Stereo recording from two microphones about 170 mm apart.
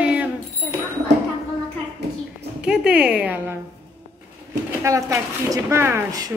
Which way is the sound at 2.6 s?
5° right (ahead or behind).